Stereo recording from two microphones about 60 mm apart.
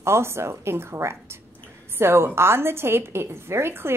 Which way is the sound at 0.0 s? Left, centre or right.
Right.